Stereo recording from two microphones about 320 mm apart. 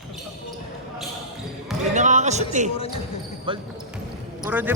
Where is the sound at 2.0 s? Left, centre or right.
Right.